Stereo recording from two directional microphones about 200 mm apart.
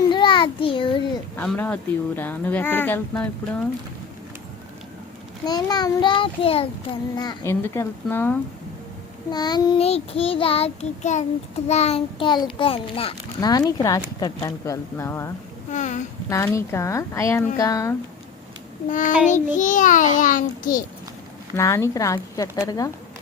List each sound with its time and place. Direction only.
0.1 s a sound: 25° left (ahead or behind)
1.4 s speech: 10° left (ahead or behind)
5.5 s a child's voice: 20° left (ahead or behind)
7.2 s speech: 15° left (ahead or behind)
9.3 s a child's voice: 20° left (ahead or behind)
15.7 s speech: 35° left (ahead or behind)
16.3 s speech: 15° left (ahead or behind)
18.9 s a child's voice: 40° left (ahead or behind)
21.5 s speech: 15° left (ahead or behind)